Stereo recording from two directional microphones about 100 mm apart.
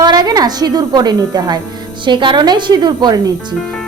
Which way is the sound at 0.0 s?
45° right (ahead or behind).